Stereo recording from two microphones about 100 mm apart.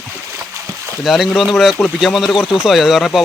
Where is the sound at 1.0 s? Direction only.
Centre (ahead or behind).